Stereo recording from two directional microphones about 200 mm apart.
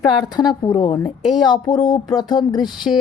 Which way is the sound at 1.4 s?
20° left (ahead or behind).